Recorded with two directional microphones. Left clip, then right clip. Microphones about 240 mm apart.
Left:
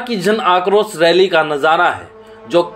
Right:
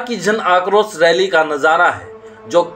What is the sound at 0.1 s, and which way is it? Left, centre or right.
Speech, left.